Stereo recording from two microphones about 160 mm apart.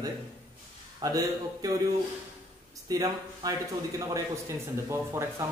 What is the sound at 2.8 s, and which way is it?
Speech, 25° right (ahead or behind).